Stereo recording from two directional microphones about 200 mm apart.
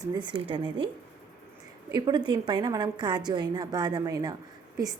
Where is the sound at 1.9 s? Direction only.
20° right (ahead or behind).